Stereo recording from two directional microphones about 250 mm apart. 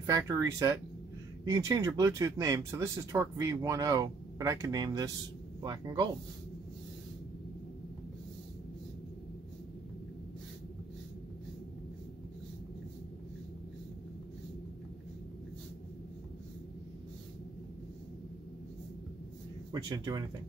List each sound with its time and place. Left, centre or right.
0.0 s speech: centre
19.7 s speech: centre